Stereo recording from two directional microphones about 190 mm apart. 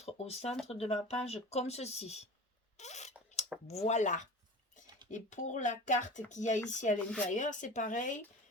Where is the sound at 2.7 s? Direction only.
35° left (ahead or behind).